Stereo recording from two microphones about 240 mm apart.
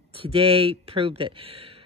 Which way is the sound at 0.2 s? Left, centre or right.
Right.